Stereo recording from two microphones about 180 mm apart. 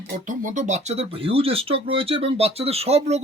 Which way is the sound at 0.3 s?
45° right (ahead or behind).